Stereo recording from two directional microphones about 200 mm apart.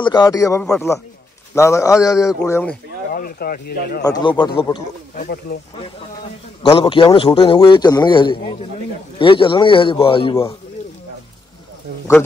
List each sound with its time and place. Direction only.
0.0 s speech: 20° left (ahead or behind)
3.1 s speech: 45° left (ahead or behind)
4.0 s a man's voice: 20° left (ahead or behind)
5.1 s speech: 45° left (ahead or behind)
6.7 s a man's voice: 25° left (ahead or behind)